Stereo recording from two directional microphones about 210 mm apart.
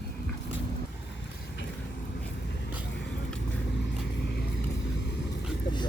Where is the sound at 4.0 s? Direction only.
55° left (ahead or behind).